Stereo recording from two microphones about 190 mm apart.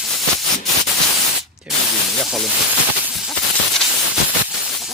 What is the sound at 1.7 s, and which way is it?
Speech, 5° right (ahead or behind).